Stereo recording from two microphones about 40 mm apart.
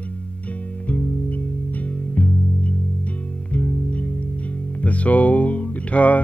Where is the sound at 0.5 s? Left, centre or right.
Left.